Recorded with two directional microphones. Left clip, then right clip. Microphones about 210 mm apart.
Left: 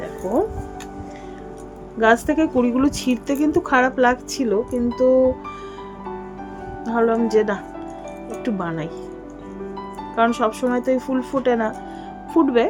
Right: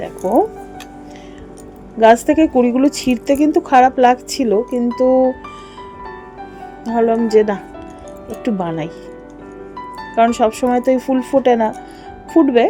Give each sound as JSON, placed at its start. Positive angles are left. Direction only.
{"t": 2.0, "sound": "a woman's voice", "side_deg": -20}
{"t": 6.9, "sound": "a woman's voice", "side_deg": -15}
{"t": 10.2, "sound": "a woman's voice", "side_deg": -20}